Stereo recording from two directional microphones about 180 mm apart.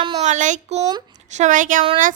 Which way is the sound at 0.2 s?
40° right (ahead or behind).